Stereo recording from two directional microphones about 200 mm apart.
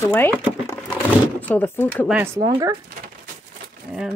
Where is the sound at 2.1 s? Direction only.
10° right (ahead or behind).